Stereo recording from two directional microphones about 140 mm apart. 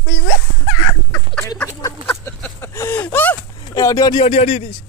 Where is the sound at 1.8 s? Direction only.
20° left (ahead or behind).